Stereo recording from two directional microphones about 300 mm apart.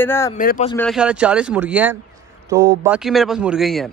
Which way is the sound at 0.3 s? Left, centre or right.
Left.